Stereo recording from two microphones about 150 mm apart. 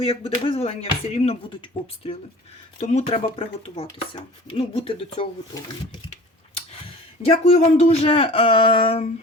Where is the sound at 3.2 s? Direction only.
35° left (ahead or behind).